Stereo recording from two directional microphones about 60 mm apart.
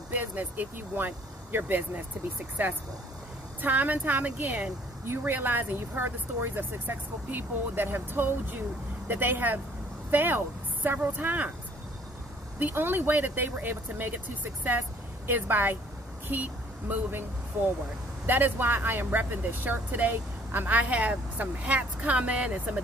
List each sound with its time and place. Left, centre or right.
0.1 s speech: right
12.5 s speech: right